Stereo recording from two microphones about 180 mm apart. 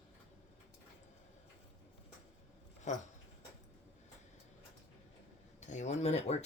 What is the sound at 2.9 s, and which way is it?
Speech, 40° left (ahead or behind).